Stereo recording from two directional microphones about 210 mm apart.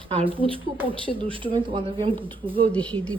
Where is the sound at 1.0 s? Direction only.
25° right (ahead or behind).